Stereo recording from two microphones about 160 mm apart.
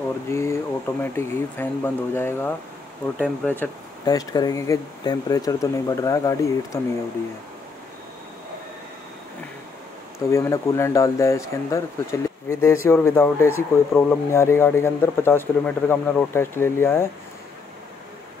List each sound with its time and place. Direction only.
0.3 s speech: 15° left (ahead or behind)
4.0 s speech: 25° left (ahead or behind)
10.1 s speech: 20° left (ahead or behind)